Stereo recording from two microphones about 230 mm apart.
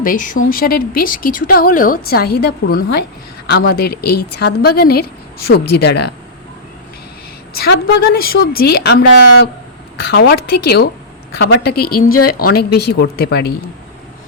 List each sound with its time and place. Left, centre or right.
0.0 s speech: left
4.0 s speech: left
4.4 s a woman's voice: left
5.5 s speech: left
5.7 s a woman's voice: left
7.6 s a woman's voice: left